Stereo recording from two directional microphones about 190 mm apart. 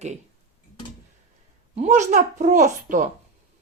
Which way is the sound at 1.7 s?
35° right (ahead or behind).